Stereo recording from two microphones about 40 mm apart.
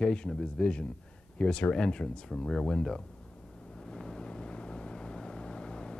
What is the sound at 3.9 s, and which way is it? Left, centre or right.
Vehicle, left.